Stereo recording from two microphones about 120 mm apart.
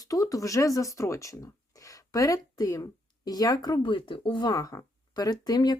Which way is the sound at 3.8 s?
45° left (ahead or behind).